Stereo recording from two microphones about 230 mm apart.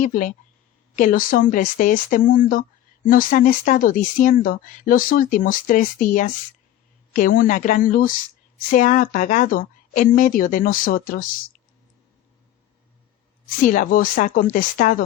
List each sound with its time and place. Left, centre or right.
0.0 s speech: left
13.7 s speech: left